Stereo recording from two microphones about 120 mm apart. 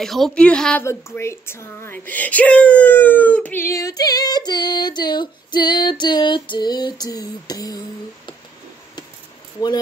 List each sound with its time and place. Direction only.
0.0 s a woman's voice: centre (ahead or behind)
0.8 s speech: 25° left (ahead or behind)